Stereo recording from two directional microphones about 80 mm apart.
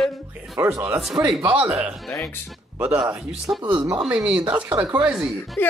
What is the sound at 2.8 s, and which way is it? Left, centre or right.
Speech, centre.